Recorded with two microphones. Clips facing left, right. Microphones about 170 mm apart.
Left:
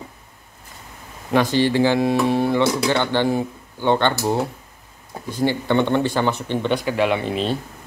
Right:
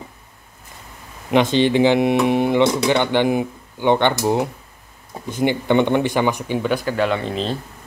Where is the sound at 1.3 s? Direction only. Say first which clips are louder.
Right 2 dB; 20° right (ahead or behind).